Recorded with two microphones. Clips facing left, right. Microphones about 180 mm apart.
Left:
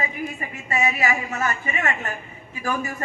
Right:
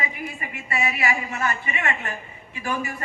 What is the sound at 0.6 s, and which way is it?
A man's voice, 40° left (ahead or behind).